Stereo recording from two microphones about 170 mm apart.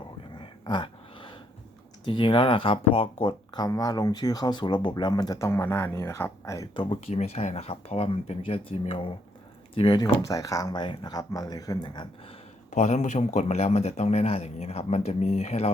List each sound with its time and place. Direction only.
0.3 s a sound: 25° left (ahead or behind)
2.0 s speech: 30° left (ahead or behind)
6.9 s a man's voice: 40° left (ahead or behind); by 12.0 s 25° left (ahead or behind)
12.7 s a man's voice: 45° left (ahead or behind)